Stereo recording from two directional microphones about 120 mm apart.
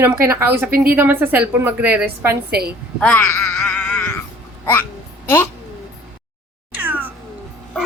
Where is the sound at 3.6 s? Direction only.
15° left (ahead or behind).